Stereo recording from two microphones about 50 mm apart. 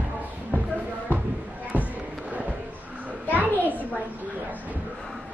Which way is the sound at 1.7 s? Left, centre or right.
Right.